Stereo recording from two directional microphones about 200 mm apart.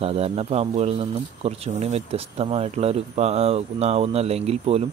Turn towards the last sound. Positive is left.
turn(degrees=-30)  # may be behind; listen again after turning